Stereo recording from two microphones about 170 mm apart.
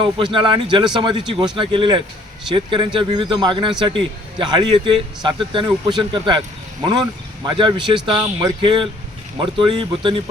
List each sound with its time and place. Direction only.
0.3 s a man's voice: 30° right (ahead or behind)